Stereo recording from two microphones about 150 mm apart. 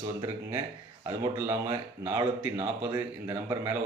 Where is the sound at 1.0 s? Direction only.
15° right (ahead or behind).